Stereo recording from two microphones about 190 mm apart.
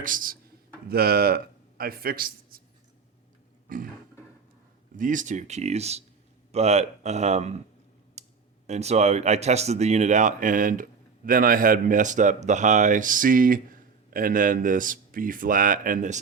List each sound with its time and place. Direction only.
0.0 s speech: 45° right (ahead or behind)
3.7 s a sound: 45° right (ahead or behind)
4.9 s speech: 45° right (ahead or behind)
8.2 s clicking: 35° right (ahead or behind)
8.6 s speech: 35° right (ahead or behind)